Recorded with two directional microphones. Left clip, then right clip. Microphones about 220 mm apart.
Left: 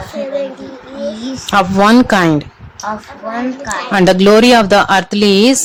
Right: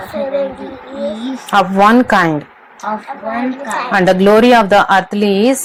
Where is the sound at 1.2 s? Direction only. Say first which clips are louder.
Even; 25° left (ahead or behind).